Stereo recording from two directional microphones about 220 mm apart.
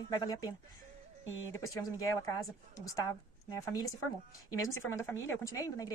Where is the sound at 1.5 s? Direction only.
15° left (ahead or behind).